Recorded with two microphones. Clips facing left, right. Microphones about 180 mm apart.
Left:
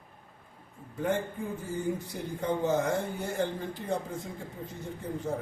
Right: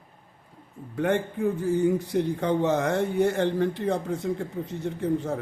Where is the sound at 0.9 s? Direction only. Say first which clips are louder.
Right 5 dB; 70° right (ahead or behind).